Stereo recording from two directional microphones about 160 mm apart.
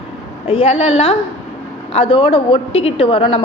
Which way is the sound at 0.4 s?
40° left (ahead or behind).